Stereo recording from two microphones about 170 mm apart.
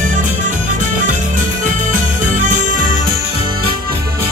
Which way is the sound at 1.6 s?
50° right (ahead or behind).